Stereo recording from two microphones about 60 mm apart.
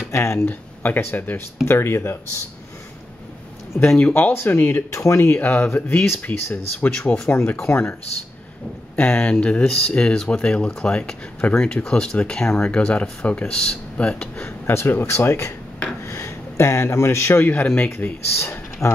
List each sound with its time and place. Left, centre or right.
0.1 s speech: left
0.5 s speech: left
1.7 s speech: left
3.8 s speech: centre
4.1 s speech: left
4.9 s speech: left
7.7 s speech: left
9.1 s speech: centre
14.7 s speech: left